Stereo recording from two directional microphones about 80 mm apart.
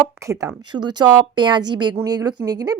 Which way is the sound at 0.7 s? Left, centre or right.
Right.